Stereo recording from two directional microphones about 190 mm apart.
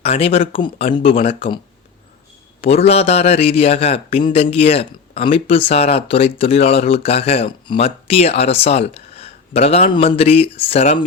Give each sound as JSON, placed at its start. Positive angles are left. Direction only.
{"t": 0.0, "sound": "speech", "side_deg": 30}
{"t": 2.6, "sound": "speech", "side_deg": 30}